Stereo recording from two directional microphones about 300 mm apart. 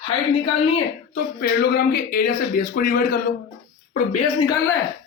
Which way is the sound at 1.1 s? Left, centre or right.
Left.